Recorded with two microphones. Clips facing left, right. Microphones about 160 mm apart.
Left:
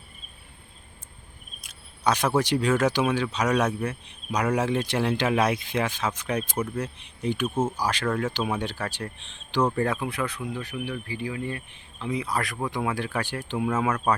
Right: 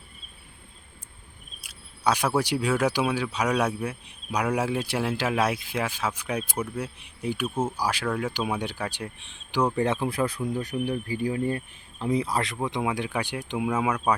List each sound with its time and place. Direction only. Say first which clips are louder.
1.6 s speech: even; 10° right (ahead or behind)